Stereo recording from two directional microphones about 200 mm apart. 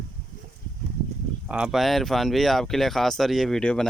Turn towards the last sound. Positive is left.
turn(degrees=5)  # may be behind; listen again after turning